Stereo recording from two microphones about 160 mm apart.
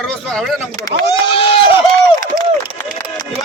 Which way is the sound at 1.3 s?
35° left (ahead or behind).